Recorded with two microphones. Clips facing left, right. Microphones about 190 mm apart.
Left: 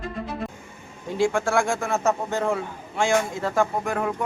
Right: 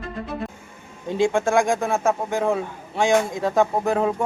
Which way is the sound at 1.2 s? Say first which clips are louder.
Right 3 dB; 20° right (ahead or behind).